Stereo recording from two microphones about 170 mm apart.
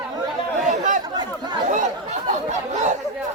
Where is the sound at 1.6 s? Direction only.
45° right (ahead or behind).